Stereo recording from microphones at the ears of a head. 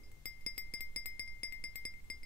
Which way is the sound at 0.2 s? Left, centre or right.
Left.